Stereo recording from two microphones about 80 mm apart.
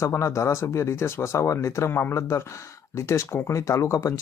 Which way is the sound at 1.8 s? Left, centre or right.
Left.